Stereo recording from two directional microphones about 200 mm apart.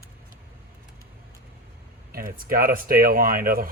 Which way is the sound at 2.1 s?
45° right (ahead or behind).